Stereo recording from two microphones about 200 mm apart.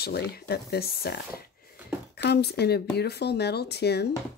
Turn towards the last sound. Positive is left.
turn(degrees=55)  # may be behind; listen again after turning